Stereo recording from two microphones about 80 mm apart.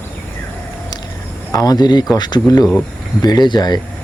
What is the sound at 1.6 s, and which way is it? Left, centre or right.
Speech, left.